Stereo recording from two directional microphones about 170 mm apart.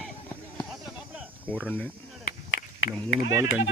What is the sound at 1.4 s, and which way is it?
Speech, 10° left (ahead or behind).